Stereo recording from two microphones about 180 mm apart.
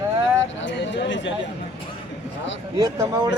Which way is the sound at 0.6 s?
80° left.